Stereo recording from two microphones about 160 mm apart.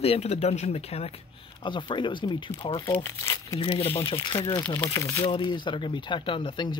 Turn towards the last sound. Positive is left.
turn(degrees=30)  # may be behind; listen again after turning